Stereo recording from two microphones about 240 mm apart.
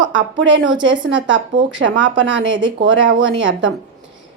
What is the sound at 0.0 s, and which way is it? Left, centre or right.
A woman's voice, right.